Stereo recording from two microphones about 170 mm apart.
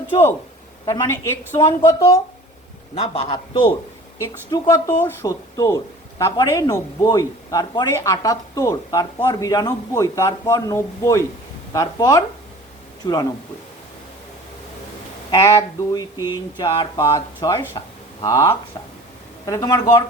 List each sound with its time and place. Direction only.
0.9 s speech: 20° left (ahead or behind)
2.9 s speech: 30° left (ahead or behind)
4.2 s speech: 20° left (ahead or behind)
15.3 s speech: 20° left (ahead or behind)